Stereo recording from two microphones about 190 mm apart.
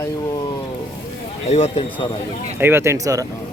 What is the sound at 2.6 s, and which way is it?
Speech, 10° right (ahead or behind).